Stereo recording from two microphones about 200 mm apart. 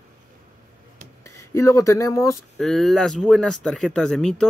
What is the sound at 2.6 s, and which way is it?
Speech, centre (ahead or behind).